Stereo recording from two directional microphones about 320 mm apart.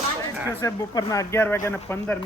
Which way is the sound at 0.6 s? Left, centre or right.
Centre.